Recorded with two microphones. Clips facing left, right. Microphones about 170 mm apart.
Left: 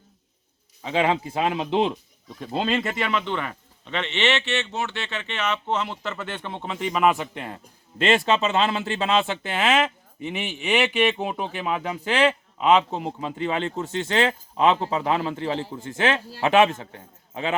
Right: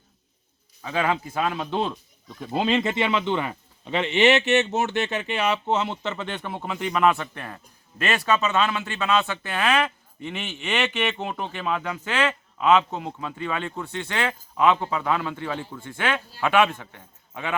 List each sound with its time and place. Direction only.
0.8 s speech: 25° left (ahead or behind)
2.5 s speech: 15° right (ahead or behind)
3.1 s speech: centre (ahead or behind)
3.5 s a sound: 5° right (ahead or behind)
5.1 s speech: 10° right (ahead or behind)
6.1 s a man's voice: 15° right (ahead or behind); by 12.6 s 15° left (ahead or behind)
12.6 s speech: 30° left (ahead or behind)